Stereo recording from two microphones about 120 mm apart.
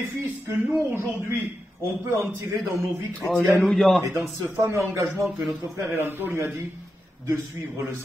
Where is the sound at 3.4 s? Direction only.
Centre (ahead or behind).